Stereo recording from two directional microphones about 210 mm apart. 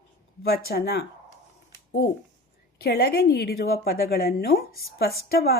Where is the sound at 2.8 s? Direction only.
50° left (ahead or behind).